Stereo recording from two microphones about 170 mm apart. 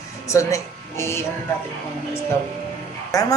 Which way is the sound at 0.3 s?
20° left (ahead or behind).